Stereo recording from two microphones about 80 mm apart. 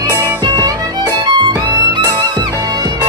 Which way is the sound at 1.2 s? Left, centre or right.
Right.